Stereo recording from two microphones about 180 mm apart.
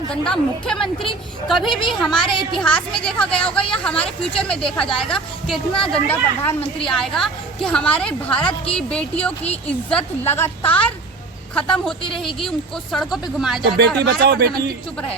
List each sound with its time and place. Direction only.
0.1 s a woman's voice: 5° left (ahead or behind)
2.2 s a woman's voice: 25° left (ahead or behind)
2.5 s a woman's voice: 5° left (ahead or behind)
6.6 s a woman's voice: 30° left (ahead or behind)
6.9 s a woman's voice: centre (ahead or behind)
13.7 s speech: 65° right (ahead or behind)